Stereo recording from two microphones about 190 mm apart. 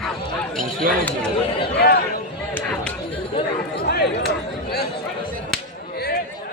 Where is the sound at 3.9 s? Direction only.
55° left (ahead or behind).